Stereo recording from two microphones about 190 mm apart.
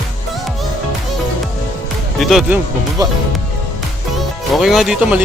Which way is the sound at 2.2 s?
Centre (ahead or behind).